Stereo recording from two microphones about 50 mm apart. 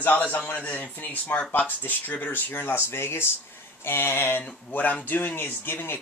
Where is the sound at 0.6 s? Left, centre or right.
Left.